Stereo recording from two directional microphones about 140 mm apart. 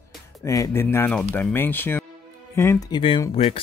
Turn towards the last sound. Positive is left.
turn(degrees=45)  # may be behind; listen again after turning